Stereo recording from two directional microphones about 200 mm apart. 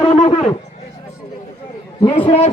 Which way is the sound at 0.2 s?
30° left (ahead or behind).